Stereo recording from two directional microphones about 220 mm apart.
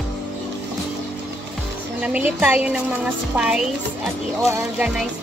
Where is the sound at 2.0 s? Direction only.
5° right (ahead or behind).